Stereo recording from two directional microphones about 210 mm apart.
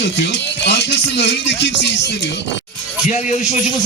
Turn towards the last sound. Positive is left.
turn(degrees=35)  # may be behind; listen again after turning